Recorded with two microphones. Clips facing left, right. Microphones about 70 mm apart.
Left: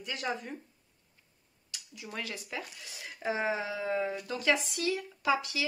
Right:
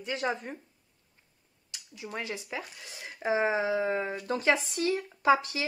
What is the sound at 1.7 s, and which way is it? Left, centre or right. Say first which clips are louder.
Speech: right 4 dB; right.